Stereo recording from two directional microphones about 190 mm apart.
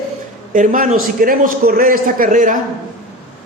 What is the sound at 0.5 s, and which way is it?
A man's voice, 45° right (ahead or behind).